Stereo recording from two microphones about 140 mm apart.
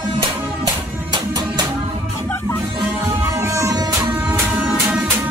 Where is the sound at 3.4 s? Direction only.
20° right (ahead or behind).